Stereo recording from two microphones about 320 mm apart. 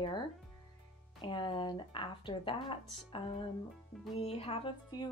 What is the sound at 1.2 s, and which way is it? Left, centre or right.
Speech, centre.